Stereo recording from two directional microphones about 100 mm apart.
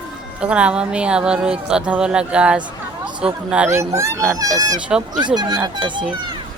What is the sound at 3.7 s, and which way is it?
Speech, 30° right (ahead or behind).